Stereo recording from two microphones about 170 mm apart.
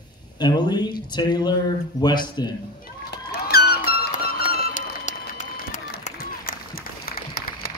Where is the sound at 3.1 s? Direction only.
65° left (ahead or behind).